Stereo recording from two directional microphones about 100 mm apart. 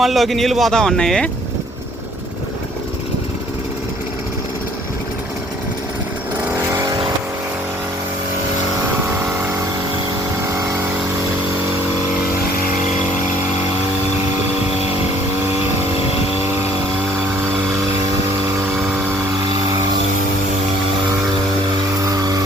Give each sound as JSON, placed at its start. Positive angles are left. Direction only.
{"t": 0.0, "sound": "a man's voice", "side_deg": 0}
{"t": 22.1, "sound": "vehicle", "side_deg": -40}